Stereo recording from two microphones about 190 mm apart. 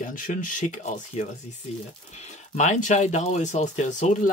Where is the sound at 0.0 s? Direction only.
45° left (ahead or behind).